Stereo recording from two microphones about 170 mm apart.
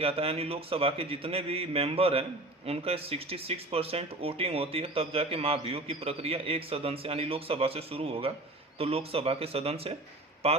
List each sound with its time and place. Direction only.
0.0 s speech: 35° right (ahead or behind)